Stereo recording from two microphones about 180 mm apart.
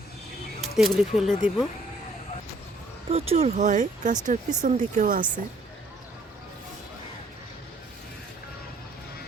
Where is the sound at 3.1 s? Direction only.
35° right (ahead or behind).